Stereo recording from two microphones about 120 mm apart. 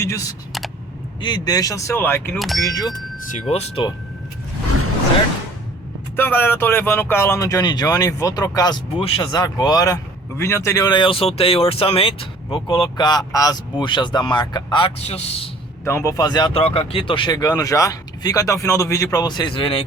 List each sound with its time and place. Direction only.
0.0 s speech: 25° left (ahead or behind)
2.4 s speech: centre (ahead or behind)
2.6 s speech: 35° left (ahead or behind)
3.5 s a man's voice: 65° left (ahead or behind)
6.1 s speech: 15° left (ahead or behind)
10.8 s speech: 35° left (ahead or behind)
11.1 s speech: 50° left (ahead or behind)
14.9 s a man's voice: 60° left (ahead or behind)
15.8 s speech: 20° left (ahead or behind)
16.6 s speech: 55° left (ahead or behind)